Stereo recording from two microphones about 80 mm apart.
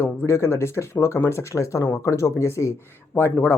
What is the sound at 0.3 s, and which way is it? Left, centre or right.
Speech, left.